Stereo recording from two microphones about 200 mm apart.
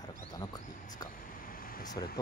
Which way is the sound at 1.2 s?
45° left (ahead or behind).